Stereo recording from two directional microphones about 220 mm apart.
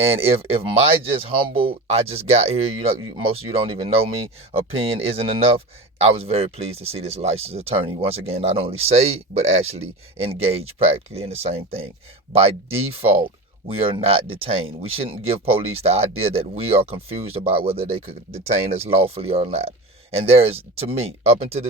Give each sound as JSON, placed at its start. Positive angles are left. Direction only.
{"t": 0.0, "sound": "speech", "side_deg": -25}
{"t": 13.8, "sound": "speech", "side_deg": -25}